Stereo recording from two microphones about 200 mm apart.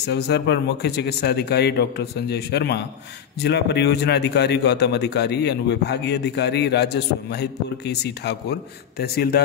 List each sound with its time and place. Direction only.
0.0 s a man's voice: 55° left (ahead or behind)